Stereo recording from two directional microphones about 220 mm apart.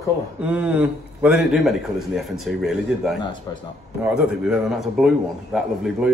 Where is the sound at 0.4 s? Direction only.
5° right (ahead or behind).